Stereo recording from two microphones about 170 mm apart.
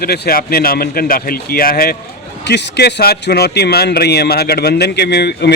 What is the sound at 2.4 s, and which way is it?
A man's voice, 90° left.